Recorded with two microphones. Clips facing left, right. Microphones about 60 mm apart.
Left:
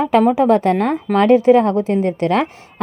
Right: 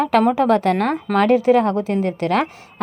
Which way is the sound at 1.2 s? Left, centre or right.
Left.